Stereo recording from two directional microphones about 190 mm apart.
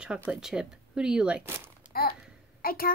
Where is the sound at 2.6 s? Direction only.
50° left (ahead or behind).